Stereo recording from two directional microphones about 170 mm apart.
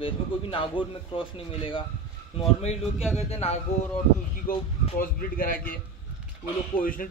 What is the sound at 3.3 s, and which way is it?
Speech, 35° left (ahead or behind).